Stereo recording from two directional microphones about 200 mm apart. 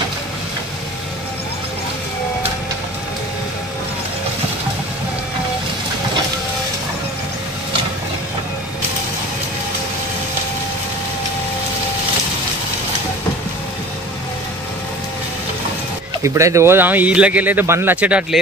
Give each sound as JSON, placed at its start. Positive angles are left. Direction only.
{"t": 16.2, "sound": "speech", "side_deg": -15}